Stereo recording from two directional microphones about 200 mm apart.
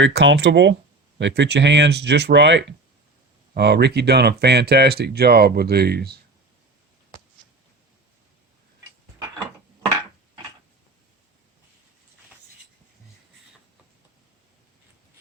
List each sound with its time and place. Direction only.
0.0 s speech: 60° right (ahead or behind)